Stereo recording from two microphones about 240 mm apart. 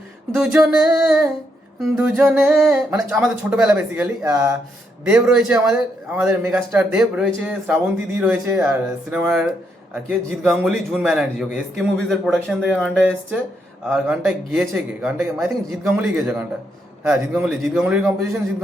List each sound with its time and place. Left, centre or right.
0.3 s a man's voice: centre
0.9 s a man's voice: centre
2.0 s a man's voice: centre
5.0 s a man's voice: centre